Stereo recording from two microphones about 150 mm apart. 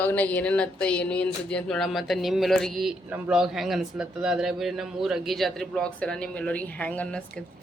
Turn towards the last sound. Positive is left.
turn(degrees=5)  # may be behind; listen again after turning